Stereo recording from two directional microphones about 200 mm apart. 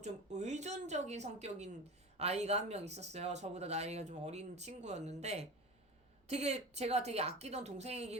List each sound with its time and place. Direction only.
0.0 s speech: 35° right (ahead or behind)